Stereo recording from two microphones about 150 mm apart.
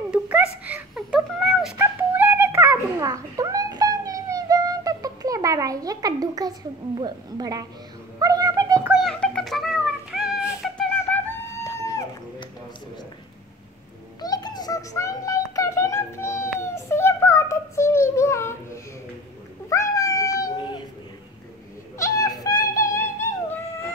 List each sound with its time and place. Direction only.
0.1 s whimper: 10° right (ahead or behind)
1.8 s cat: 15° right (ahead or behind)
7.0 s a woman's voice: 30° right (ahead or behind)
8.2 s wail: 25° right (ahead or behind)
8.9 s cat: 5° left (ahead or behind)
10.6 s flute: 5° left (ahead or behind)
11.1 s a sound: 10° left (ahead or behind)
14.2 s a sound: 25° left (ahead or behind)
19.7 s cat: 20° left (ahead or behind)
21.9 s a sound: 20° left (ahead or behind)